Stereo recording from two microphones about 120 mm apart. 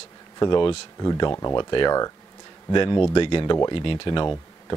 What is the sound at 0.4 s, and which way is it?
Speech, 40° left (ahead or behind).